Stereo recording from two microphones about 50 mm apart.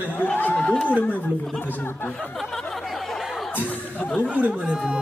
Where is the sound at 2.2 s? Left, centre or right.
Centre.